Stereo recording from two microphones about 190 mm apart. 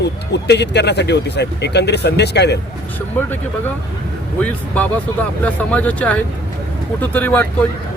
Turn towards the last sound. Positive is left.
turn(degrees=10)  # may be behind; listen again after turning